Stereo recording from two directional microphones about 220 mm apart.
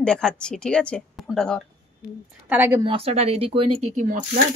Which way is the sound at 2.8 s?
25° right (ahead or behind).